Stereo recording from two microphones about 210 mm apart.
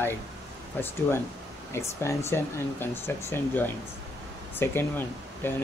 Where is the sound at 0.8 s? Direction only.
10° left (ahead or behind).